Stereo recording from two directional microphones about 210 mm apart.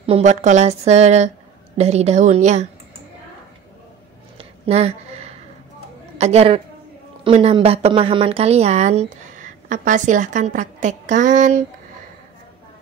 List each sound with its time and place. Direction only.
0.0 s a woman's voice: 30° right (ahead or behind)
4.4 s a sound: 30° right (ahead or behind)
6.1 s a woman's voice: 30° right (ahead or behind)